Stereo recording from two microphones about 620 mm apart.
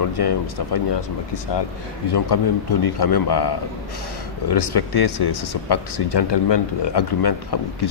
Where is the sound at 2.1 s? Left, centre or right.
Left.